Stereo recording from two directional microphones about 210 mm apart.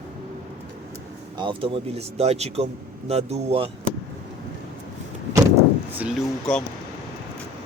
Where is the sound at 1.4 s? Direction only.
25° right (ahead or behind).